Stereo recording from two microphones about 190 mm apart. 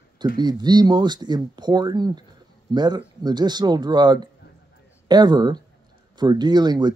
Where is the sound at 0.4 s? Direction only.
20° right (ahead or behind).